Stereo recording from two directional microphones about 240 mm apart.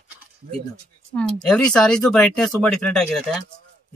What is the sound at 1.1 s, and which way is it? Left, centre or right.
Speech, centre.